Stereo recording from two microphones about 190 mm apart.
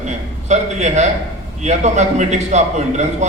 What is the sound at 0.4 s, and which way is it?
A man's voice, 35° right (ahead or behind).